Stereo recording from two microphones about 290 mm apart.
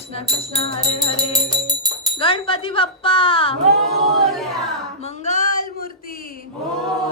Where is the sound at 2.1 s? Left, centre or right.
Centre.